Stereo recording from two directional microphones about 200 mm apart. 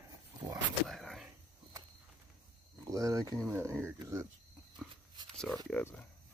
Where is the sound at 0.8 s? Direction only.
Centre (ahead or behind).